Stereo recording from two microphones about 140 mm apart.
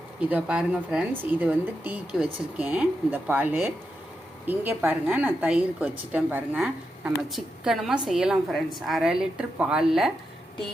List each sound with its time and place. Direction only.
0.2 s a woman's voice: 10° right (ahead or behind)